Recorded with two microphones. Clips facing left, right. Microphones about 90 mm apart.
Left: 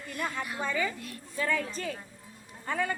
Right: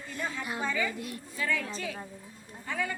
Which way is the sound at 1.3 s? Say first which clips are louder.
Left 2 dB; 40° left (ahead or behind).